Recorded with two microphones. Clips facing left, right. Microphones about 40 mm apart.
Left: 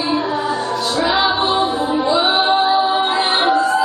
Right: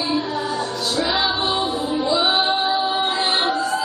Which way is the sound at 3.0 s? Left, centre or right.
Centre.